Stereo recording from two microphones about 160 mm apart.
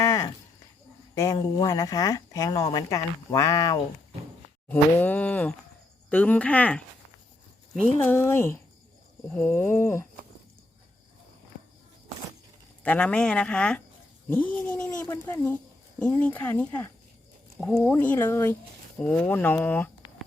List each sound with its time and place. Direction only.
0.0 s a sound: 20° left (ahead or behind)
1.1 s speech: 20° left (ahead or behind)
4.7 s speech: 10° left (ahead or behind)
12.8 s speech: 10° left (ahead or behind)